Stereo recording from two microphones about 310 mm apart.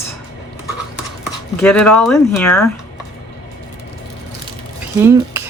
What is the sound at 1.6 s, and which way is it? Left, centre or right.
A woman's voice, centre.